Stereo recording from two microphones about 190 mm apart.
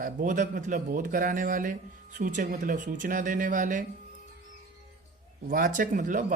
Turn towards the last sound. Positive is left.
turn(degrees=-40)  # may be behind; listen again after turning